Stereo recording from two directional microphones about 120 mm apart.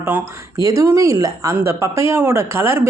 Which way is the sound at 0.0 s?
20° right (ahead or behind).